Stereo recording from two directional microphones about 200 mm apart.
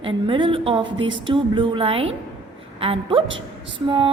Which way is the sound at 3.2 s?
70° right (ahead or behind).